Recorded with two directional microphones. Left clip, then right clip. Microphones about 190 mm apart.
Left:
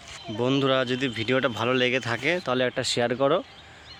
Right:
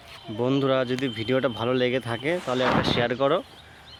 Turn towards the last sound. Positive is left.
turn(degrees=5)  # may be behind; listen again after turning